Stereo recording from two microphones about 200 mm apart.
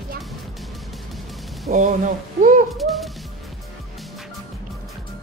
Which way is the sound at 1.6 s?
40° right (ahead or behind).